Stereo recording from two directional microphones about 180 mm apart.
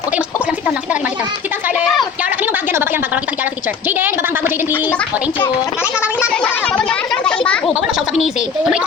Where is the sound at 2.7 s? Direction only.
10° right (ahead or behind).